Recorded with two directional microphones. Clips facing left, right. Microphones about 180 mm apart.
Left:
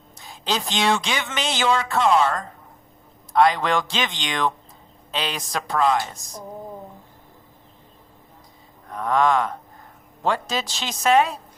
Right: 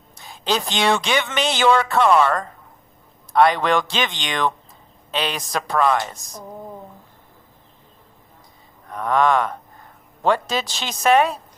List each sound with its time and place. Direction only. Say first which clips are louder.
0.2 s a man's voice: right 3 dB; 60° right (ahead or behind)
9.0 s a man's voice: right 1 dB; 65° right (ahead or behind)